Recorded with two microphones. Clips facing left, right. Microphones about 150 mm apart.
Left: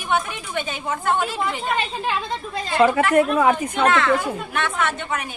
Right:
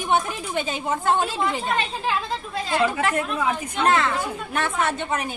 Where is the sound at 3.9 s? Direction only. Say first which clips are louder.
Left 3 dB; 35° right (ahead or behind).